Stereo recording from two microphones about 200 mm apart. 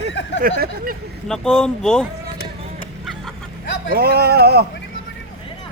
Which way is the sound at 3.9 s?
50° right (ahead or behind).